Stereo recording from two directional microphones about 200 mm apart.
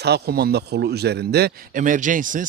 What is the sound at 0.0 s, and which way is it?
Speech, 55° right (ahead or behind).